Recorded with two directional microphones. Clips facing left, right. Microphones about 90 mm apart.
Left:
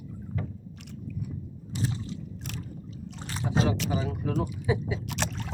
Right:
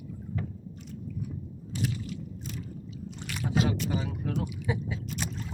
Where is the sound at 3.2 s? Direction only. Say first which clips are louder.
Left 1 dB; 30° left (ahead or behind).